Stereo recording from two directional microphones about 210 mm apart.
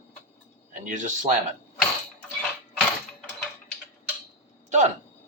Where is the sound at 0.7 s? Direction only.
35° right (ahead or behind).